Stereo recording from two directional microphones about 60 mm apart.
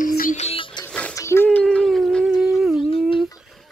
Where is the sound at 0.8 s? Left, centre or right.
Centre.